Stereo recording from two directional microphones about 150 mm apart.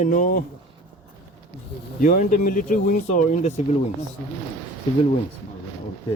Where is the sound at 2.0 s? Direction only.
65° left (ahead or behind).